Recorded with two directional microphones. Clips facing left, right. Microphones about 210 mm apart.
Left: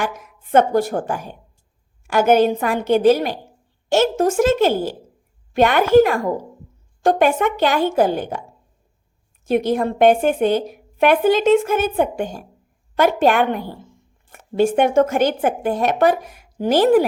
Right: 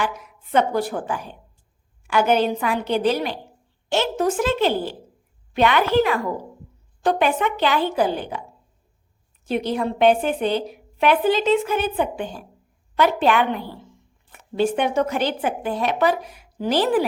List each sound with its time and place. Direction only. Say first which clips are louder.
0.0 s a woman's voice: left 1 dB; 45° left (ahead or behind)